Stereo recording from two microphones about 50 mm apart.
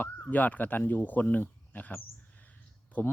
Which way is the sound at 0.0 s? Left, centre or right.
Left.